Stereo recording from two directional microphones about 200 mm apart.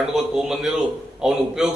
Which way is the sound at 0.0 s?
Centre (ahead or behind).